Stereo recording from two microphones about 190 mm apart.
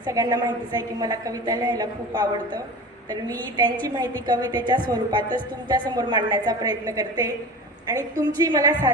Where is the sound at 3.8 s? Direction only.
20° right (ahead or behind).